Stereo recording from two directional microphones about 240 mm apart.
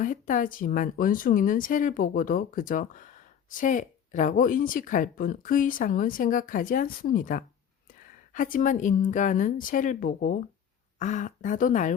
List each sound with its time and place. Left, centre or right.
0.0 s speech: left